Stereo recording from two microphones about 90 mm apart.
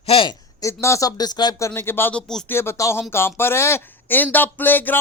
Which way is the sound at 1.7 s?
25° left (ahead or behind).